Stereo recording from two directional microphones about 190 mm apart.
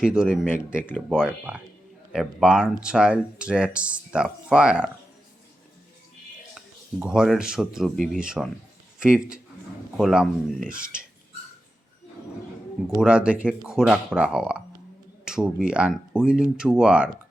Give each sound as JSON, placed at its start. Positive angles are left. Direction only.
{"t": 0.0, "sound": "speech", "side_deg": -5}
{"t": 7.0, "sound": "speech", "side_deg": -5}
{"t": 13.0, "sound": "speech", "side_deg": -5}